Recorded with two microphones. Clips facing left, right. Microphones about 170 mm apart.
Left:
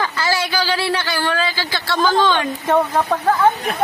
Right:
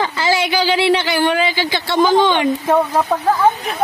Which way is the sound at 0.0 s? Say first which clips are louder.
Right 3 dB; 20° right (ahead or behind).